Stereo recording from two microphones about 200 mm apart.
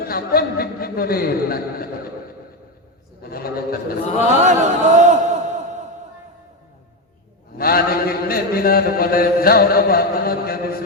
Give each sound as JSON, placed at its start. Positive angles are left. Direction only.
{"t": 0.0, "sound": "a man's voice", "side_deg": 50}
{"t": 3.2, "sound": "a man's voice", "side_deg": 50}
{"t": 4.4, "sound": "a sound", "side_deg": -35}
{"t": 7.6, "sound": "a man's voice", "side_deg": 50}